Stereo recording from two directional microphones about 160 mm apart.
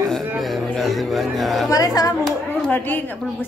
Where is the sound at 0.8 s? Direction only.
Centre (ahead or behind).